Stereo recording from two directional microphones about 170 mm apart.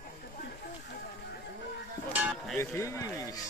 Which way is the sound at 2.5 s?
15° left (ahead or behind).